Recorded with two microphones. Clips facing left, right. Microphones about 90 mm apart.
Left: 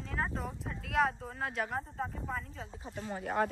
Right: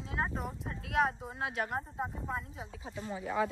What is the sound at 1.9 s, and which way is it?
Speech, 15° right (ahead or behind).